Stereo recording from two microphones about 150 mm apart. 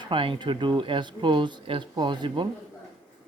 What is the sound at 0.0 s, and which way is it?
Speech, 35° right (ahead or behind).